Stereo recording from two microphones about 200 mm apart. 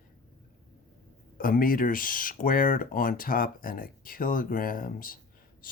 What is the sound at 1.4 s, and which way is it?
Speech, 45° left (ahead or behind).